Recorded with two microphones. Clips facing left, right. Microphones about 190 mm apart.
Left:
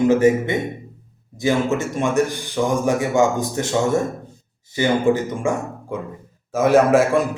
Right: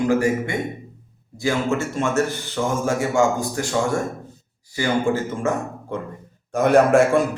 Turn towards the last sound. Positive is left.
turn(degrees=0)  # may be behind; listen again after turning